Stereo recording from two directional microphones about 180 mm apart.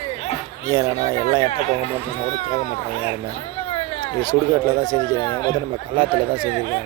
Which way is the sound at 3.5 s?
30° left (ahead or behind).